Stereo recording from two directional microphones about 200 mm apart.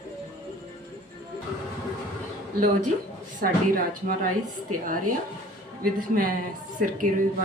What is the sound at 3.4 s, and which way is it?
Speech, 45° right (ahead or behind).